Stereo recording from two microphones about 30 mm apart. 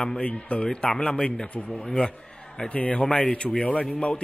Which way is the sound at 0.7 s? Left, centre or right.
Left.